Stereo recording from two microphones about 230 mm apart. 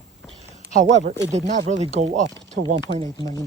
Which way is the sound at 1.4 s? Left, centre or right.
Right.